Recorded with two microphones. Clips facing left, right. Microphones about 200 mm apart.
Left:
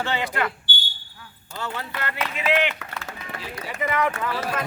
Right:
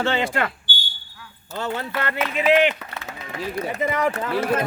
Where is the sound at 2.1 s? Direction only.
10° right (ahead or behind).